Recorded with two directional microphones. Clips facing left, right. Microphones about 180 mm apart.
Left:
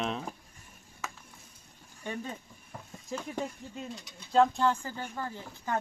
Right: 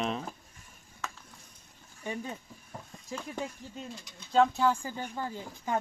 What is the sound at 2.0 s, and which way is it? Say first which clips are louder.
Speech: right 1 dB; 10° right (ahead or behind).